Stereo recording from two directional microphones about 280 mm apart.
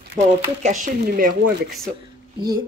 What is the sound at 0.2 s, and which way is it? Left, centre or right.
Speech, right.